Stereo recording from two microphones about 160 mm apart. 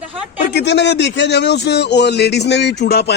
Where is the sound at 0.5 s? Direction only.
90° left.